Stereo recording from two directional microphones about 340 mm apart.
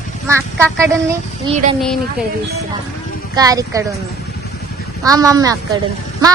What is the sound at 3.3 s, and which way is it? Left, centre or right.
Speech, centre.